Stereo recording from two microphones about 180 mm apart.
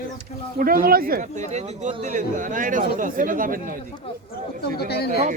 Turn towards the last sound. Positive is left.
turn(degrees=65)  # may be behind; listen again after turning